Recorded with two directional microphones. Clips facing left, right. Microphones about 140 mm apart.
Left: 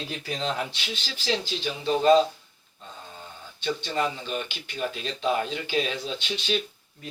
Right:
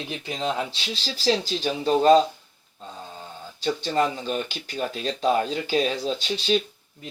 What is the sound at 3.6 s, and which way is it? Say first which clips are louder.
Speech: right 4 dB; 35° right (ahead or behind).